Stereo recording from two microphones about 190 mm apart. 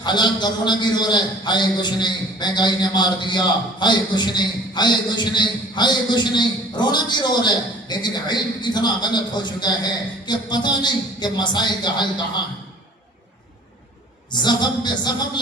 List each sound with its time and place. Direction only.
0.0 s a man's voice: 25° left (ahead or behind)
14.3 s a man's voice: 25° left (ahead or behind)